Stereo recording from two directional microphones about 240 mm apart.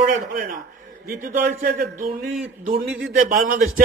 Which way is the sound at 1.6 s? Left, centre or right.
Right.